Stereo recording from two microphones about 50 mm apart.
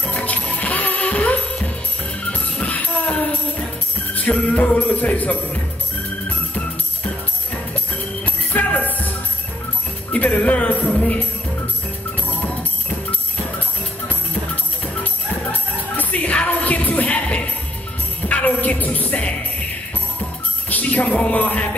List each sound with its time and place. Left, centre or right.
0.1 s music: left
4.8 s speech: left
8.5 s music: left
10.1 s music: left
16.0 s music: left
20.7 s music: left
21.1 s speech: left